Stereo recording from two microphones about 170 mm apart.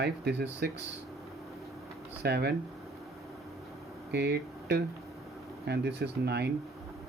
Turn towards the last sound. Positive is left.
turn(degrees=-80)